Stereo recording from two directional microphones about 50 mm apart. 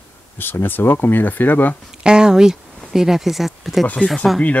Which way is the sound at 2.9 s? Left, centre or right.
Centre.